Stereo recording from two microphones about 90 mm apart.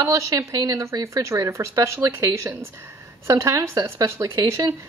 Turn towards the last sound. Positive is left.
turn(degrees=-40)  # may be behind; listen again after turning